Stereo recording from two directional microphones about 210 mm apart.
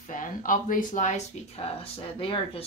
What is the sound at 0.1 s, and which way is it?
Speech, 40° left (ahead or behind).